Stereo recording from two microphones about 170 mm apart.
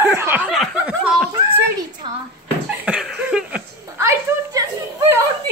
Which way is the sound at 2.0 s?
30° right (ahead or behind).